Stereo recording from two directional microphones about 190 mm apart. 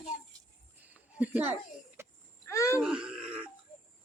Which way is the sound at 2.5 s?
15° left (ahead or behind).